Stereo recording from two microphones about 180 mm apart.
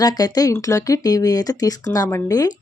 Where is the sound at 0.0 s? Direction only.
20° left (ahead or behind).